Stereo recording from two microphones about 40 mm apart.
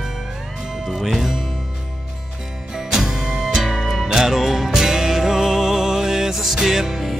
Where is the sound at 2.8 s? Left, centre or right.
Centre.